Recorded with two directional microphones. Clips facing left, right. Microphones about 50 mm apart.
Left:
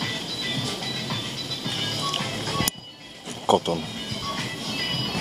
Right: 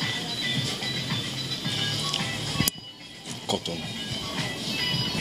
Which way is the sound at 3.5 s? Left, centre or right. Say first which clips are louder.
Left 10 dB; left.